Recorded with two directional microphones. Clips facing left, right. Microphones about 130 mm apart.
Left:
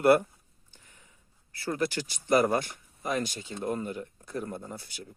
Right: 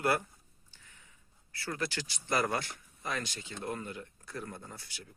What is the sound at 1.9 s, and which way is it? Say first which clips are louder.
Speech: left 9 dB; 15° left (ahead or behind).